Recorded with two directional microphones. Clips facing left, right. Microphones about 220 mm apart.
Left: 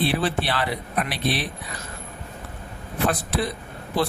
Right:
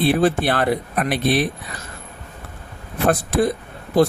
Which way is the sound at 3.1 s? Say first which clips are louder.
Right 7 dB; 50° right (ahead or behind).